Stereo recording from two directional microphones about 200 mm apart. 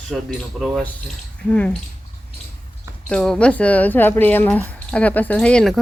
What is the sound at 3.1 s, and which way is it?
Speech, 5° left (ahead or behind).